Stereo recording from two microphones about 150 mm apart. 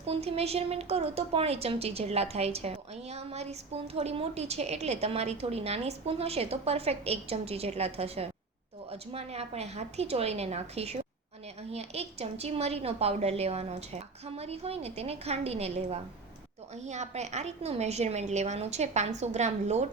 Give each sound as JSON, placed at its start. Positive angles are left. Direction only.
{"t": 0.1, "sound": "a woman's voice", "side_deg": -45}